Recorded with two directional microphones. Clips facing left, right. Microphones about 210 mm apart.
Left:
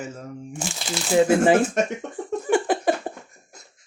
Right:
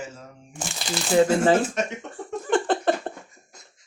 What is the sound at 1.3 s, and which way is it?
Speech, 15° left (ahead or behind).